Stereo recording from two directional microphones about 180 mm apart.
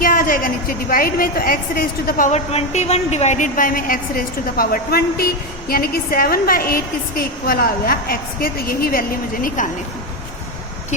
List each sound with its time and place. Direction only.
0.0 s a woman's voice: 50° left (ahead or behind)